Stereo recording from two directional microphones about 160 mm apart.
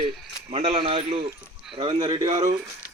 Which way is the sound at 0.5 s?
40° right (ahead or behind).